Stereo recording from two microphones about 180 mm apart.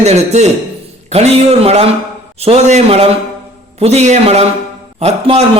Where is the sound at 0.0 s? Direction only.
40° right (ahead or behind).